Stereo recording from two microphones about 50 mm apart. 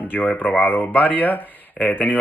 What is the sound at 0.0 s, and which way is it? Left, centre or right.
Speech, left.